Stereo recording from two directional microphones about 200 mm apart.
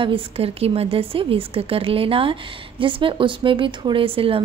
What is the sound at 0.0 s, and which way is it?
A woman's voice, 30° right (ahead or behind).